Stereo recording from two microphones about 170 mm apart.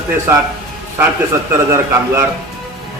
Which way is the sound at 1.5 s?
15° right (ahead or behind).